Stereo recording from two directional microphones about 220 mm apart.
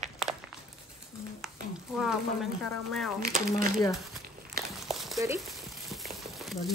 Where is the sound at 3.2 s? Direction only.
35° right (ahead or behind).